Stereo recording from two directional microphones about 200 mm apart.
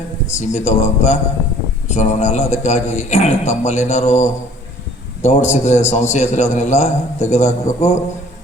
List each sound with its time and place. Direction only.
0.3 s a man's voice: 35° left (ahead or behind)